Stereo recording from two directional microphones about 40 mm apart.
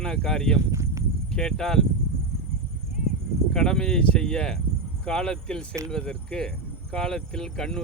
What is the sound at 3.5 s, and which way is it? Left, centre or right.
Speech, centre.